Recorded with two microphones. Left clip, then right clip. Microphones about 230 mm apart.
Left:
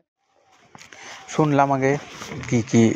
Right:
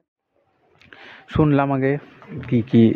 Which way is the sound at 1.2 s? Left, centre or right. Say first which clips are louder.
Left 1 dB; centre.